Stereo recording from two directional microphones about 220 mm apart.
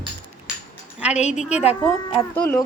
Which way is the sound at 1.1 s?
30° left (ahead or behind).